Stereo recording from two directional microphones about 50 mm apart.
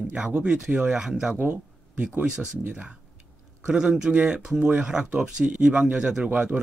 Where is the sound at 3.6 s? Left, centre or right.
Centre.